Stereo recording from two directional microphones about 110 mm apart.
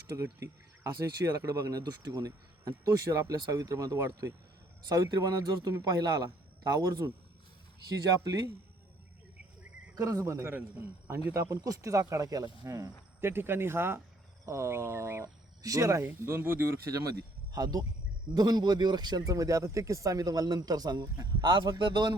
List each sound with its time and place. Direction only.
0.2 s speech: 25° right (ahead or behind)
8.2 s speech: 30° right (ahead or behind)
9.9 s speech: 30° right (ahead or behind)